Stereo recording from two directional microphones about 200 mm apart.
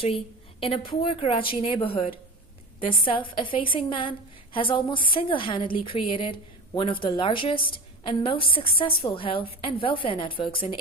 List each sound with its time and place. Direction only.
0.0 s a woman's voice: 30° left (ahead or behind)